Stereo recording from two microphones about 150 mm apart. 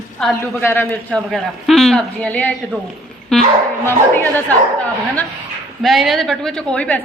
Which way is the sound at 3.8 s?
15° left (ahead or behind).